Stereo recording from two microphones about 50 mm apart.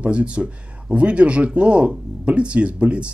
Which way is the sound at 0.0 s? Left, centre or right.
Right.